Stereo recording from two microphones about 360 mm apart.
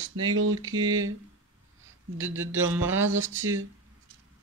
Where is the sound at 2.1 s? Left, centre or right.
Centre.